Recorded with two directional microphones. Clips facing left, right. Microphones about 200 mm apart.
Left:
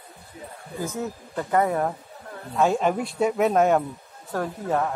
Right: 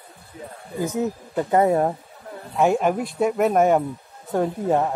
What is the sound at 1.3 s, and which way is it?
Speech, 25° right (ahead or behind).